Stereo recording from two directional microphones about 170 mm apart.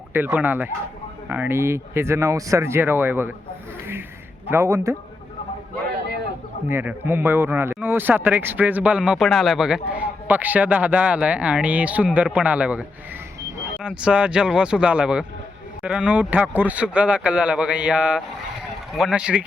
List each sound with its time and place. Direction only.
0.1 s speech: 10° right (ahead or behind)
4.4 s speech: 15° right (ahead or behind)
6.7 s speech: 10° right (ahead or behind)
13.8 s speech: 5° right (ahead or behind)